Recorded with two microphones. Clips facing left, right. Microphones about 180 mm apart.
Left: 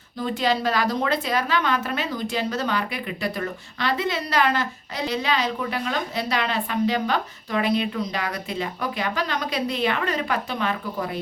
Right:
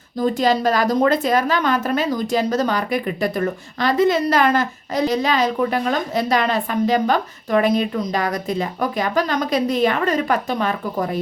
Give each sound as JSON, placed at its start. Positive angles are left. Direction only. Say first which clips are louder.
{"t": 0.2, "sound": "a woman's voice", "louder": "right 6 dB", "side_deg": -40}